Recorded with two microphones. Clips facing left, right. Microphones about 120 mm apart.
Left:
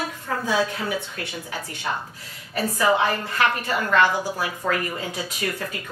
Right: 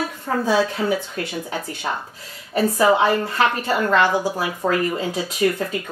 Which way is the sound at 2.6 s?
30° right (ahead or behind).